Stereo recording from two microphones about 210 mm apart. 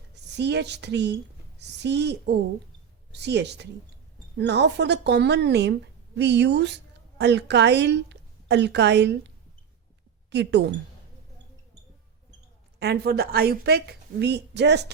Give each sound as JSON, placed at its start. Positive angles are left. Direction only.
{"t": 0.3, "sound": "a woman's voice", "side_deg": -55}
{"t": 10.2, "sound": "a woman's voice", "side_deg": -55}
{"t": 12.8, "sound": "a woman's voice", "side_deg": -50}